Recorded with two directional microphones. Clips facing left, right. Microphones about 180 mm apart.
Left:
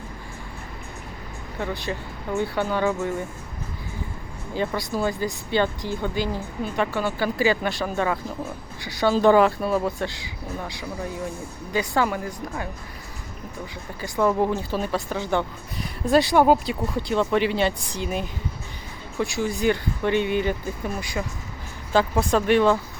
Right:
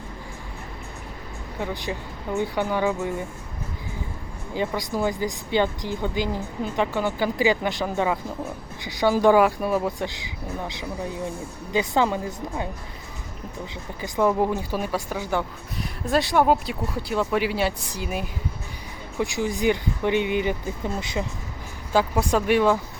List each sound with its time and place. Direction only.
1.5 s speech: 15° right (ahead or behind)
4.5 s speech: 15° right (ahead or behind)
14.0 s speech: 15° right (ahead or behind)
21.9 s speech: 10° right (ahead or behind)